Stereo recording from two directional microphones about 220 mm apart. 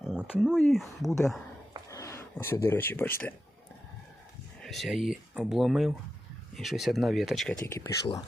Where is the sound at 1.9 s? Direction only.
15° left (ahead or behind).